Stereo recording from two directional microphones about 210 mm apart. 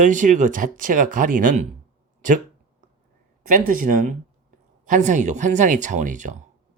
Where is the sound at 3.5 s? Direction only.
40° right (ahead or behind).